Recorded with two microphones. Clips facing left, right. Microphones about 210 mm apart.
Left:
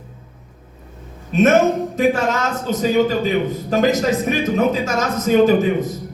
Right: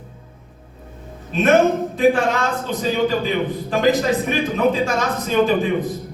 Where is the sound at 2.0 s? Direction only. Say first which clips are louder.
Right 3 dB; 45° left (ahead or behind).